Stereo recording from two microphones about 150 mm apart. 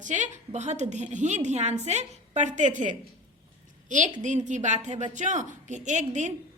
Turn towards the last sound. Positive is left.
turn(degrees=-50)  # may be behind; listen again after turning